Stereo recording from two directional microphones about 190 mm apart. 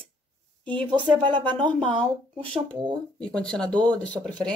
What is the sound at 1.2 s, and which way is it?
Speech, 25° right (ahead or behind).